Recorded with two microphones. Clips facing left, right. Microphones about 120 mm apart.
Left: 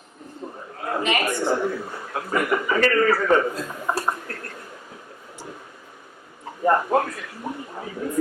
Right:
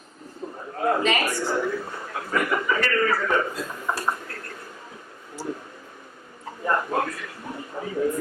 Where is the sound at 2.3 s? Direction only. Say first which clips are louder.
Left 2 dB; 15° left (ahead or behind).